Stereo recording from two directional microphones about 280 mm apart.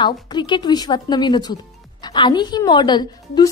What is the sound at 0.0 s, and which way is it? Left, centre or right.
Speech, centre.